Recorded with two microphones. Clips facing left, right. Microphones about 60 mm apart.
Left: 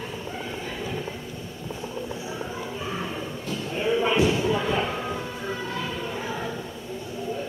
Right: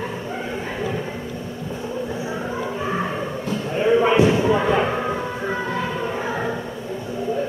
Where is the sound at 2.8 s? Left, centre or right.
Right.